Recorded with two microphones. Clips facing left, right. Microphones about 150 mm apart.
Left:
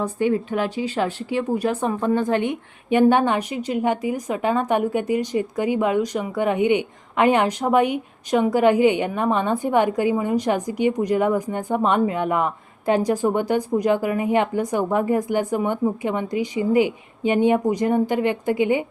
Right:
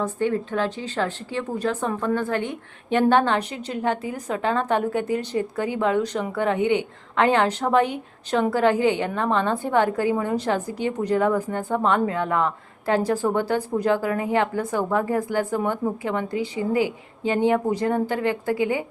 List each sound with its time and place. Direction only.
0.0 s a woman's voice: 15° left (ahead or behind)